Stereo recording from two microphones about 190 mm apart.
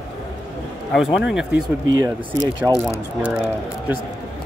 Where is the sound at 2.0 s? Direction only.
20° right (ahead or behind).